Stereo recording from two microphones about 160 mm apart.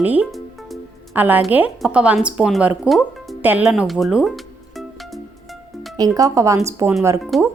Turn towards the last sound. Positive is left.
turn(degrees=0)  # may be behind; listen again after turning